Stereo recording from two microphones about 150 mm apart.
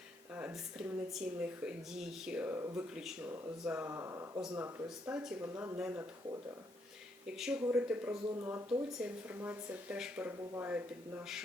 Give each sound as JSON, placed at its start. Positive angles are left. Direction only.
{"t": 0.3, "sound": "speech", "side_deg": -5}
{"t": 2.9, "sound": "speech", "side_deg": -5}
{"t": 7.3, "sound": "speech", "side_deg": -5}
{"t": 8.4, "sound": "speech", "side_deg": -20}
{"t": 8.9, "sound": "speech", "side_deg": -10}